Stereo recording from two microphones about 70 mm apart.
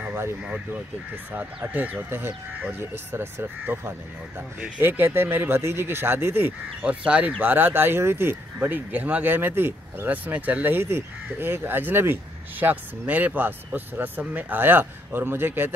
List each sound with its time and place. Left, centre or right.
0.1 s a sound: right
1.3 s speech: right
6.8 s speech: centre